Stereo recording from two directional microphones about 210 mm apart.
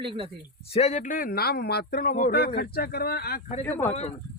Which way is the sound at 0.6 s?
30° left (ahead or behind).